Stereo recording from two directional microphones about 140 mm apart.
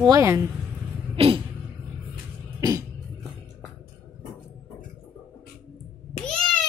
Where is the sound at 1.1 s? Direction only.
40° right (ahead or behind).